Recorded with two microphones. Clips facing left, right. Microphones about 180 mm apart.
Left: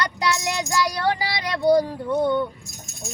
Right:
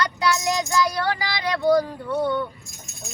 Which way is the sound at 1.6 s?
15° left (ahead or behind).